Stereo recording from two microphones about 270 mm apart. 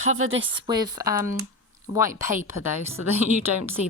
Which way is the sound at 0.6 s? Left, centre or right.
Centre.